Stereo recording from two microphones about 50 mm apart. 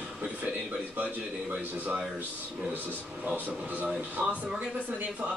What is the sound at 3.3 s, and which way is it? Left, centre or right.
Speech, right.